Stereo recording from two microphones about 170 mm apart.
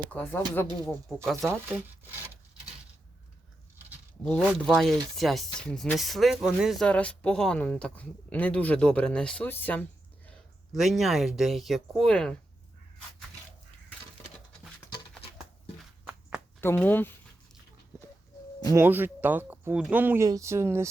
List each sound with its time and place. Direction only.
0.1 s speech: 10° left (ahead or behind)
1.4 s speech: centre (ahead or behind)
4.4 s speech: centre (ahead or behind)
10.2 s speech: centre (ahead or behind)
16.6 s speech: 15° left (ahead or behind)
18.7 s speech: 15° right (ahead or behind)